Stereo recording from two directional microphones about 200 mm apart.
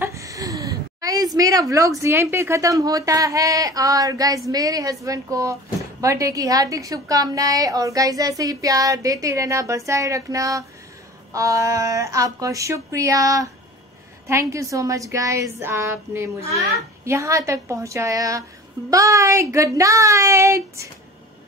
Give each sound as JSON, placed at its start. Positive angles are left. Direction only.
{"t": 0.0, "sound": "a woman's voice", "side_deg": -15}
{"t": 14.5, "sound": "speech", "side_deg": -15}